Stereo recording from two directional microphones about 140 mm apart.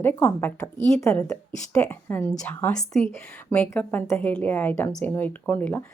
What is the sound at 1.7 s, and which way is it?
A woman's voice, 10° left (ahead or behind).